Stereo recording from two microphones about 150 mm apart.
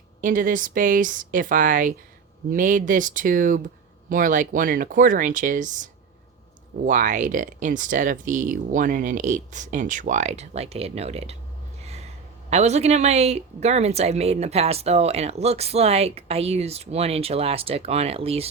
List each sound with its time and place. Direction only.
0.2 s speech: 60° right (ahead or behind); by 11.3 s 45° right (ahead or behind)
12.5 s speech: 50° right (ahead or behind)